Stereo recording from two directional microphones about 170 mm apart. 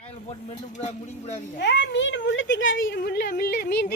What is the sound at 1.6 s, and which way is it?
Speech, 90° left.